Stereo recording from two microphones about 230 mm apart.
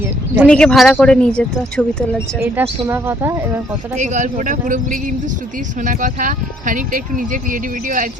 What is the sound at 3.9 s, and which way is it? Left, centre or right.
Speech, right.